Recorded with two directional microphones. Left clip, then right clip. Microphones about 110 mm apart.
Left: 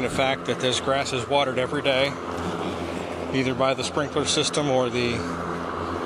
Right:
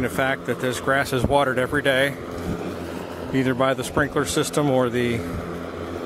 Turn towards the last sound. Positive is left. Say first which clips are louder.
# right 2 dB
turn(degrees=-65)  # may be behind; listen again after turning